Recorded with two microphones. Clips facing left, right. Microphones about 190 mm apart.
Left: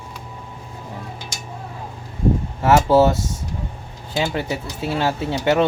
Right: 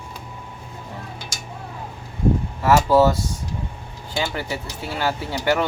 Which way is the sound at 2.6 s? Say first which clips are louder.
Left 1 dB; 25° left (ahead or behind).